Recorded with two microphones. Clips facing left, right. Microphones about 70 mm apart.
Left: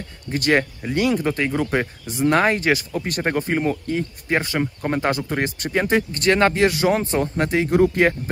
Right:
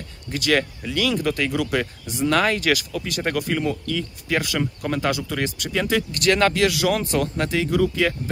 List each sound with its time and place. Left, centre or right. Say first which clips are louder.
0.3 s speech: left 2 dB; left
3.3 s speech: left 2 dB; left